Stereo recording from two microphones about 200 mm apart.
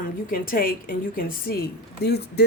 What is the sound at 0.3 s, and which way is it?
Speech, 45° left (ahead or behind).